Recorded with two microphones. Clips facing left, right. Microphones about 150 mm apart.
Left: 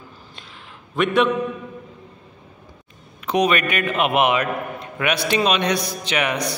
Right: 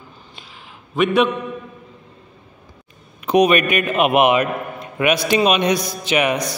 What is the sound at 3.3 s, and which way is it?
A man's voice, 15° right (ahead or behind).